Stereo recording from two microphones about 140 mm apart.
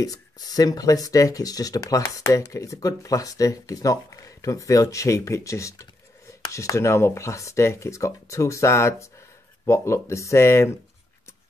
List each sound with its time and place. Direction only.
0.0 s speech: 25° left (ahead or behind)